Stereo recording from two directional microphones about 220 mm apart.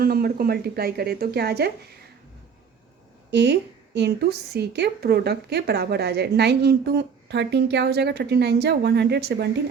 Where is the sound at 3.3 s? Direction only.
50° right (ahead or behind).